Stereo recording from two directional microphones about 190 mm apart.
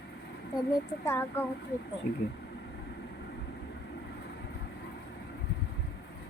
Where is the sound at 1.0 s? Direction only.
10° left (ahead or behind).